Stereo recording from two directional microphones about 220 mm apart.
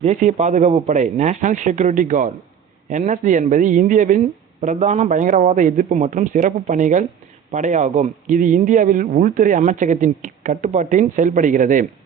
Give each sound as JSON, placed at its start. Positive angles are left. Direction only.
{"t": 0.0, "sound": "a man's voice", "side_deg": -30}